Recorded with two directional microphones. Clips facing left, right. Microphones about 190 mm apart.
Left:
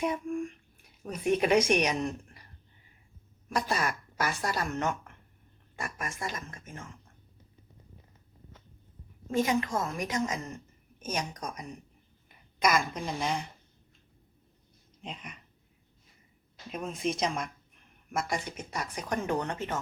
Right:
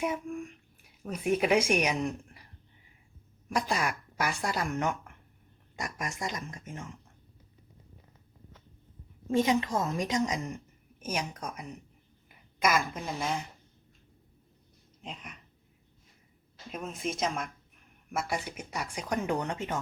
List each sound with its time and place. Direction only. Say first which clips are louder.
0.0 s speech: left 2 dB; 5° right (ahead or behind)
3.5 s speech: even; 10° right (ahead or behind)
9.4 s a woman's voice: even; 20° right (ahead or behind); by 13.4 s centre (ahead or behind)
15.0 s a woman's voice: left 1 dB; centre (ahead or behind)
16.7 s a woman's voice: left 3 dB; centre (ahead or behind)